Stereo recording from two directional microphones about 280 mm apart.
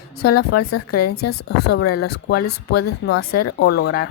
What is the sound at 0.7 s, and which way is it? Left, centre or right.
Speech, left.